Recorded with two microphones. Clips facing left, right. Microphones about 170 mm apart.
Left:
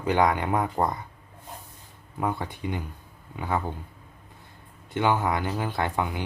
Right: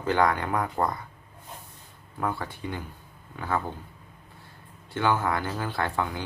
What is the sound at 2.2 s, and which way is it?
Speech, 20° left (ahead or behind).